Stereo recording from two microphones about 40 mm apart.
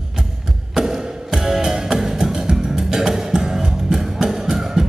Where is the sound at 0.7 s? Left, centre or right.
Centre.